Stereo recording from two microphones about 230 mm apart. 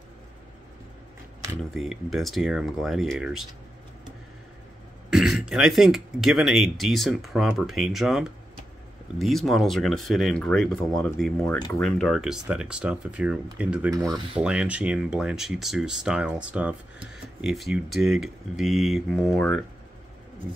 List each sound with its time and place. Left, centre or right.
1.8 s speech: centre
5.1 s speech: centre
13.9 s rub: centre
14.4 s speech: centre